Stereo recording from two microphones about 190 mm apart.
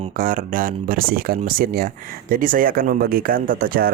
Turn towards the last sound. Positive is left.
turn(degrees=-50)  # may be behind; listen again after turning